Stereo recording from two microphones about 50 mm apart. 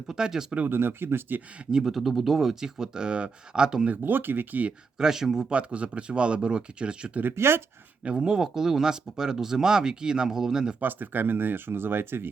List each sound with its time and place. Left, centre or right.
0.1 s speech: centre
0.7 s speech: right
1.7 s speech: centre
4.0 s speech: right
4.9 s speech: centre
5.5 s speech: right
7.3 s speech: right
8.0 s speech: centre
10.8 s speech: right